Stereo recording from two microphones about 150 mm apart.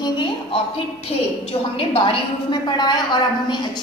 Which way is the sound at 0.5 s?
45° left (ahead or behind).